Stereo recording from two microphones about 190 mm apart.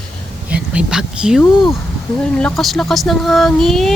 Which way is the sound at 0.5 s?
5° right (ahead or behind).